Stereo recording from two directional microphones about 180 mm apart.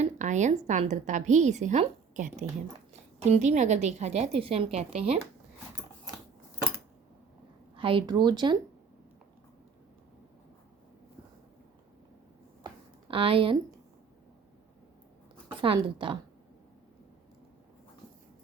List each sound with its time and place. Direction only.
0.0 s a woman's voice: 40° right (ahead or behind)
7.8 s speech: 30° right (ahead or behind)
12.6 s a sound: 30° right (ahead or behind)
15.6 s speech: 30° right (ahead or behind)